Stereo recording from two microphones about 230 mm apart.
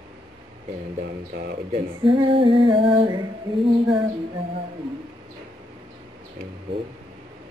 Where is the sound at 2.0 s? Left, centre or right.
Right.